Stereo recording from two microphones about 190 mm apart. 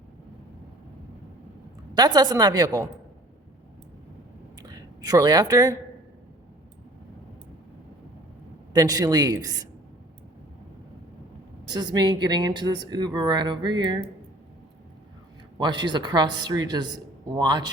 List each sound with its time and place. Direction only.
2.0 s speech: 20° right (ahead or behind)
4.6 s a sound: 20° right (ahead or behind)
8.7 s speech: 20° right (ahead or behind)
11.7 s speech: 20° right (ahead or behind)
15.5 s speech: 25° right (ahead or behind)